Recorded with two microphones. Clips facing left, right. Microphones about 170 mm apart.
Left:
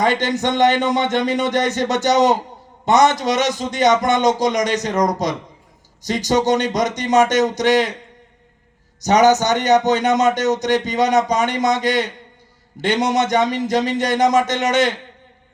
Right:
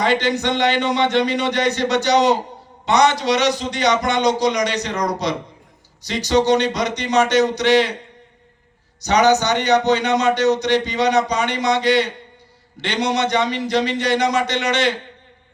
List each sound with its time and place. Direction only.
0.0 s a man's voice: 45° left (ahead or behind)
9.0 s a man's voice: 45° left (ahead or behind)